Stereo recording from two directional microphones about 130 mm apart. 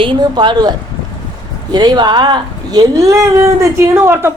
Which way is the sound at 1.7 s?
30° right (ahead or behind).